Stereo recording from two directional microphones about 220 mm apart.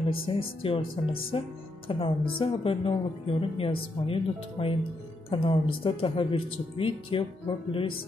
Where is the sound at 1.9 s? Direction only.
25° left (ahead or behind).